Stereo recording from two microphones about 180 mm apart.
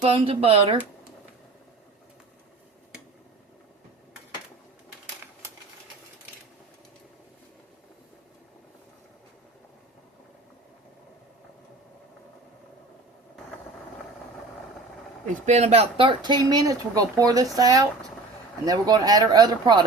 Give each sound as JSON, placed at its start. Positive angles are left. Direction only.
{"t": 0.0, "sound": "speech", "side_deg": -30}
{"t": 15.4, "sound": "speech", "side_deg": -40}